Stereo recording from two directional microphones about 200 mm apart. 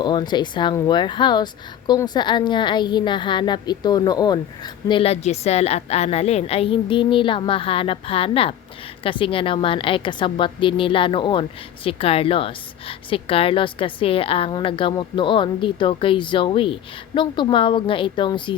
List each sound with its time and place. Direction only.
0.0 s a woman's voice: 20° left (ahead or behind)